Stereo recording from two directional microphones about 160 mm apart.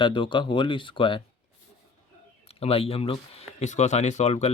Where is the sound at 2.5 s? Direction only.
40° left (ahead or behind).